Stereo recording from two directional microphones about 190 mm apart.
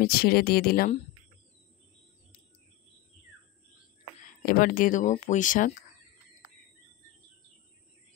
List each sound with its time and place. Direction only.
0.0 s speech: 55° left (ahead or behind)
4.5 s speech: 50° left (ahead or behind)